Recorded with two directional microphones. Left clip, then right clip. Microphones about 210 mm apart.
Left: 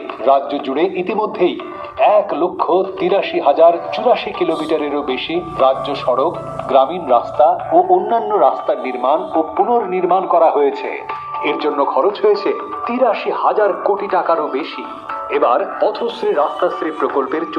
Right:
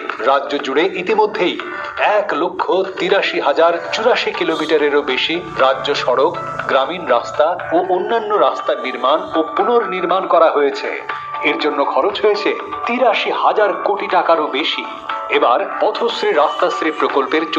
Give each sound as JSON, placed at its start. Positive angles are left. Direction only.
{"t": 0.3, "sound": "a man's voice", "side_deg": -15}
{"t": 9.1, "sound": "speech", "side_deg": -35}
{"t": 9.6, "sound": "a man's voice", "side_deg": -20}